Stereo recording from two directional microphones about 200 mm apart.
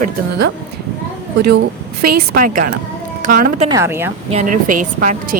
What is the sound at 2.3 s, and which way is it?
A woman's voice, 40° right (ahead or behind).